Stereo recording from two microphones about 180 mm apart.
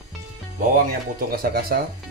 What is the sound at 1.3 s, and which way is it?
Speech, 60° right (ahead or behind).